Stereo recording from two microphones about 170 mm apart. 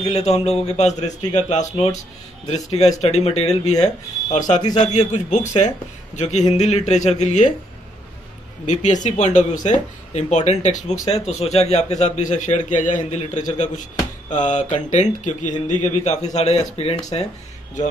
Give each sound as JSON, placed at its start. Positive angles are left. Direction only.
{"t": 0.0, "sound": "speech", "side_deg": 40}
{"t": 8.6, "sound": "speech", "side_deg": 45}